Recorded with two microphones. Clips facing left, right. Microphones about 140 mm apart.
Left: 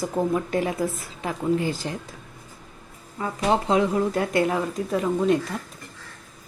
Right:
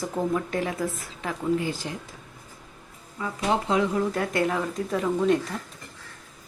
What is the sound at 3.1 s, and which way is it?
Speech, 35° left (ahead or behind).